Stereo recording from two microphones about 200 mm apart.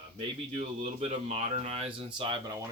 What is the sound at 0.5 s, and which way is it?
Speech, 30° right (ahead or behind).